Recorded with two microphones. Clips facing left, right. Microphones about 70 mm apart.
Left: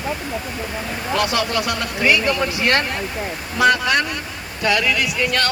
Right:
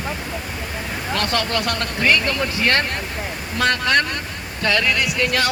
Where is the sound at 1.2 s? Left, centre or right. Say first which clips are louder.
Left 2 dB; centre.